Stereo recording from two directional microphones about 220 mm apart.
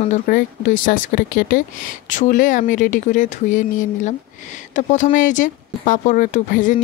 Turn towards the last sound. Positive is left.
turn(degrees=35)  # may be behind; listen again after turning